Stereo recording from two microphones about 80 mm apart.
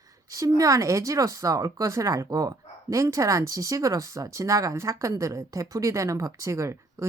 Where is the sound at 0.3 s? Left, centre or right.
Right.